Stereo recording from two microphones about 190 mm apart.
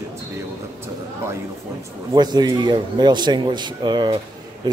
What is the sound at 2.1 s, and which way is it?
A man's voice, 20° right (ahead or behind).